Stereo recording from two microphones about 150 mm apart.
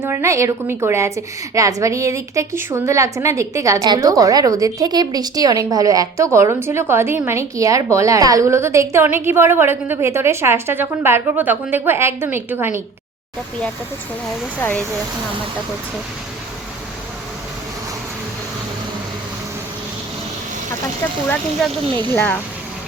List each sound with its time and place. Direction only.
0.0 s a woman's voice: 15° right (ahead or behind)
14.6 s speech: 10° left (ahead or behind)
22.1 s speech: 10° left (ahead or behind)